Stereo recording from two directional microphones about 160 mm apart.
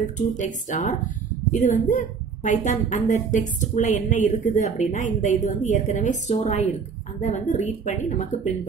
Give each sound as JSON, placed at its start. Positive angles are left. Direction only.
{"t": 0.4, "sound": "a woman's voice", "side_deg": 50}